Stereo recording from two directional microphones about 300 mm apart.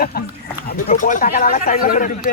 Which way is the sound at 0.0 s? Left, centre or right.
Left.